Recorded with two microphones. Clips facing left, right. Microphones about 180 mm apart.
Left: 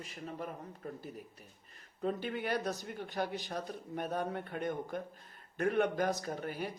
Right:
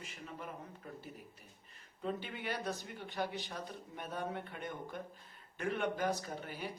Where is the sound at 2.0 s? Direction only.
45° left (ahead or behind).